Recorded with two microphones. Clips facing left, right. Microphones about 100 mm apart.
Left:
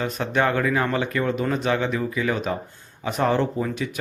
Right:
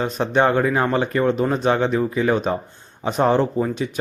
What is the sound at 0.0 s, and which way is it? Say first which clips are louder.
Speech: right 4 dB; 30° right (ahead or behind).